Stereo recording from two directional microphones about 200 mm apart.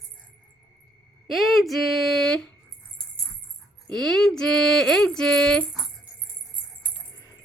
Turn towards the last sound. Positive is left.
turn(degrees=5)  # may be behind; listen again after turning